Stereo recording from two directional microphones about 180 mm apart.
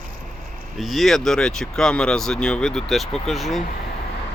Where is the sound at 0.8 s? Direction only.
Centre (ahead or behind).